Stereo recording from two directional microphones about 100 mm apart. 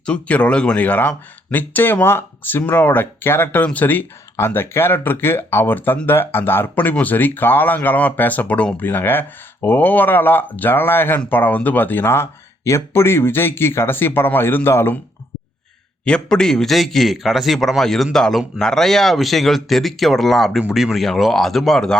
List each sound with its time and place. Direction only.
0.0 s speech: 10° left (ahead or behind)
16.0 s a man's voice: 10° left (ahead or behind)